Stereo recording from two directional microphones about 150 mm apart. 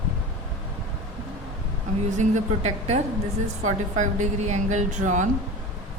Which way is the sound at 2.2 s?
45° right (ahead or behind).